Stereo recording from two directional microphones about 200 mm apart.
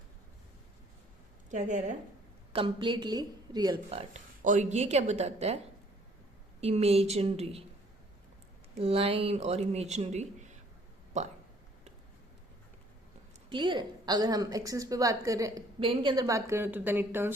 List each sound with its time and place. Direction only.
1.5 s speech: 35° right (ahead or behind)
2.5 s a woman's voice: 25° right (ahead or behind)
4.1 s speech: 35° right (ahead or behind)
6.6 s speech: 30° right (ahead or behind)
8.8 s speech: 30° right (ahead or behind)
13.5 s a woman's voice: 25° right (ahead or behind)